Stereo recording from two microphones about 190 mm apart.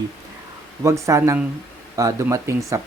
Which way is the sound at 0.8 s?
15° right (ahead or behind).